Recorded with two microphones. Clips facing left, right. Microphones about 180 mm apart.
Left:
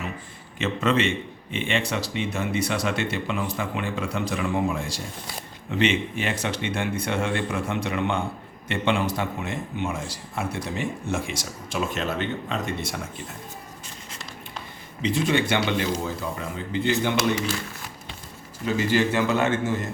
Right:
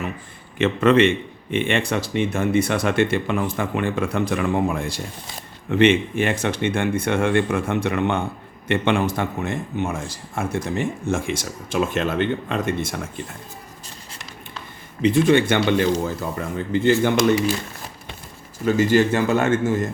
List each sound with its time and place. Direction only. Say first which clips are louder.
0.6 s a man's voice: right 7 dB; 60° right (ahead or behind)
15.0 s a man's voice: right 7 dB; 55° right (ahead or behind)
18.6 s a man's voice: right 5 dB; 45° right (ahead or behind)